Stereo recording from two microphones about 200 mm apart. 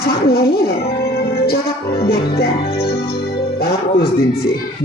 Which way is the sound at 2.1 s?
50° left (ahead or behind).